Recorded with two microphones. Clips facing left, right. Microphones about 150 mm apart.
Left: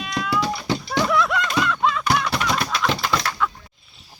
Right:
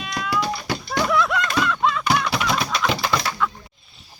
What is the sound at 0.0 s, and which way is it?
Cat, centre (ahead or behind).